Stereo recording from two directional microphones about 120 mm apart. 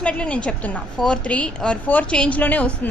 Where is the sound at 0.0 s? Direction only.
10° left (ahead or behind).